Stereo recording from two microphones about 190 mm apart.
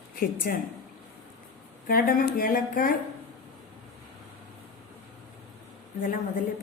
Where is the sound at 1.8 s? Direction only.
50° left (ahead or behind).